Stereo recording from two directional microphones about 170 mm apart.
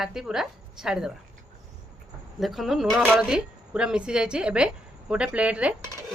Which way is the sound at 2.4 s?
Centre (ahead or behind).